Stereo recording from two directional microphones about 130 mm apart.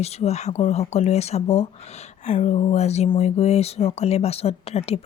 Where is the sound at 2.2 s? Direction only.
65° left (ahead or behind).